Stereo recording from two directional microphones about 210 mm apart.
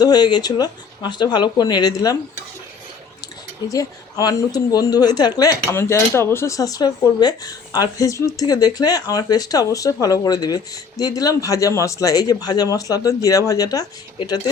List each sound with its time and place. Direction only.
0.0 s speech: 20° left (ahead or behind)
3.7 s a woman's voice: 15° left (ahead or behind)